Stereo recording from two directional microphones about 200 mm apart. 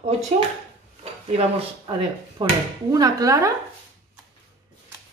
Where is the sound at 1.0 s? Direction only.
30° right (ahead or behind).